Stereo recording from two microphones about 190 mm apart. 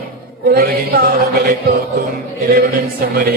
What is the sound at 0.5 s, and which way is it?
Music, 50° right (ahead or behind).